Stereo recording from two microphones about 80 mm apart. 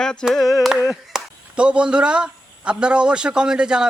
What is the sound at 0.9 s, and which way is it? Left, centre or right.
A man's voice, centre.